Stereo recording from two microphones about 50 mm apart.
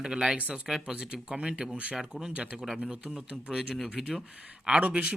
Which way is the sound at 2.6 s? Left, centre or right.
Centre.